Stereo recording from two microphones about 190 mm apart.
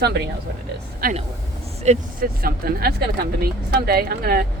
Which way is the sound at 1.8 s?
50° right (ahead or behind).